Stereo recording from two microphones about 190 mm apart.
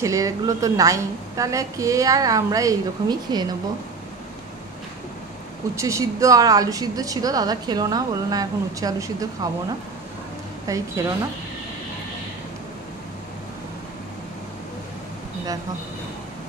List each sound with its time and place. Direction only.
0.0 s a woman's voice: 15° right (ahead or behind)
5.8 s a woman's voice: 15° right (ahead or behind)
10.7 s a woman's voice: 15° right (ahead or behind)